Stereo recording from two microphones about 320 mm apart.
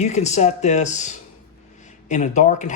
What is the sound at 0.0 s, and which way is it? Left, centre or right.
A man's voice, left.